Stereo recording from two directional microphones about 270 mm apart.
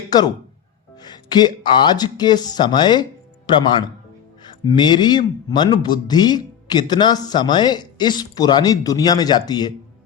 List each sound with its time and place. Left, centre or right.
0.1 s speech: centre